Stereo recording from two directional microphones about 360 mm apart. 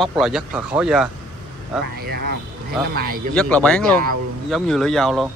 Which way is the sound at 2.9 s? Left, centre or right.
Right.